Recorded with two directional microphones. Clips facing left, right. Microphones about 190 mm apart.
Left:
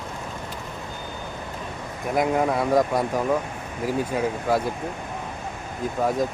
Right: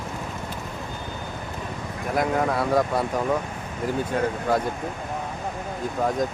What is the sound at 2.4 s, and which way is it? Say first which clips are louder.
Speech: left 1 dB; 10° left (ahead or behind).